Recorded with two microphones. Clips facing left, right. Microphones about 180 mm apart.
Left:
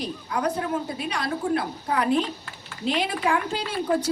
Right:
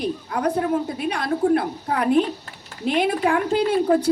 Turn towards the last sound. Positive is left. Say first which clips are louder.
# right 7 dB
turn(degrees=-55)  # may be behind; listen again after turning